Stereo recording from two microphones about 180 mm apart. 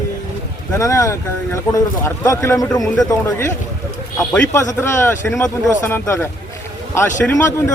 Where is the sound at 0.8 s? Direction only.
20° left (ahead or behind).